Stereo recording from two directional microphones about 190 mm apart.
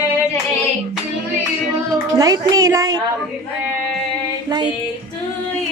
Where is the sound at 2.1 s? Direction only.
20° right (ahead or behind).